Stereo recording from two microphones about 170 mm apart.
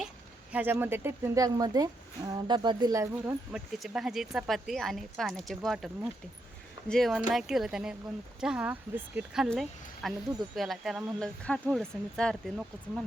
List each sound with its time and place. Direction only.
0.5 s speech: 10° right (ahead or behind)
3.5 s speech: 5° right (ahead or behind)